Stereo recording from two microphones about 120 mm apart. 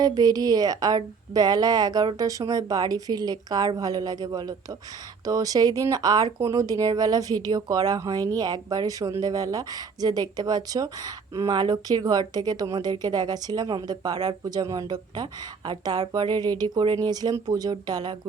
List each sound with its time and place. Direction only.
0.0 s speech: 30° right (ahead or behind)